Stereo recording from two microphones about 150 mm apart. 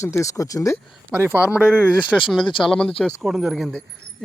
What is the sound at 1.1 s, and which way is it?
Speech, 10° right (ahead or behind).